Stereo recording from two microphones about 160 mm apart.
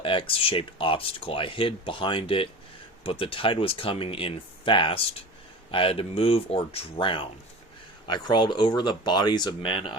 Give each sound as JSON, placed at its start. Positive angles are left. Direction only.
{"t": 0.0, "sound": "speech", "side_deg": 35}